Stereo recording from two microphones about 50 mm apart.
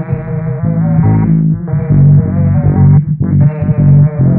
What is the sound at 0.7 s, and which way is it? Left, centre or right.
Music, centre.